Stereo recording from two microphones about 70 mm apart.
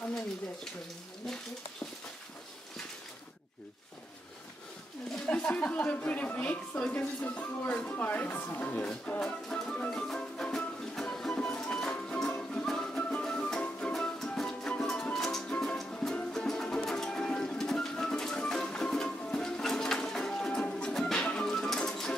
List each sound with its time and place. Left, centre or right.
5.2 s a woman's voice: centre
9.9 s music: centre